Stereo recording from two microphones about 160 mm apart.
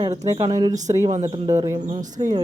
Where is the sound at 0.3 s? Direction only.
20° right (ahead or behind).